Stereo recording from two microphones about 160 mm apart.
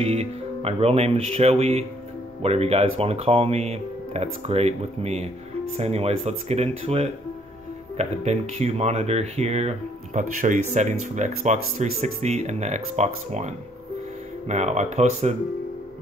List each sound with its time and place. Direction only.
0.0 s speech: 40° right (ahead or behind)
14.5 s speech: 45° right (ahead or behind)